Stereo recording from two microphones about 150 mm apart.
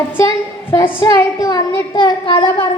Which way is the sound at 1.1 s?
25° left (ahead or behind).